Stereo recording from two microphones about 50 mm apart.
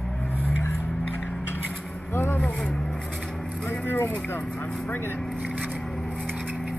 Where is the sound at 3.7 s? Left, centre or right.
Left.